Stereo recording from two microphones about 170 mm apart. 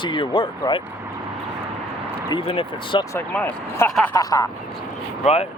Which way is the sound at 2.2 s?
30° left (ahead or behind).